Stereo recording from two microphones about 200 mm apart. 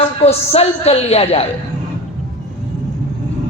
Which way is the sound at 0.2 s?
30° left (ahead or behind).